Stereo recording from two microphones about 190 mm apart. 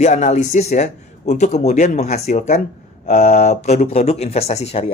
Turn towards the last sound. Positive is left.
turn(degrees=35)  # may be behind; listen again after turning